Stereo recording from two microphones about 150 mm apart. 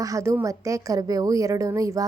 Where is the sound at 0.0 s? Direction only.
20° right (ahead or behind).